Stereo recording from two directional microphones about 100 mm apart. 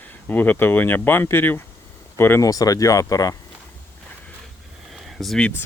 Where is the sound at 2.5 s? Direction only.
35° left (ahead or behind).